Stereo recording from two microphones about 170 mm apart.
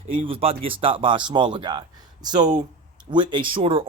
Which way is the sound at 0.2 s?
35° right (ahead or behind).